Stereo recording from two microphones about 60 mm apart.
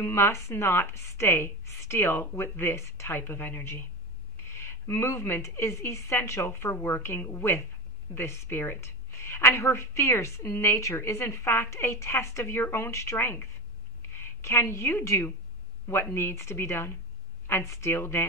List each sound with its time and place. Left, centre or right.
0.0 s a woman's voice: left
3.2 s a woman's voice: left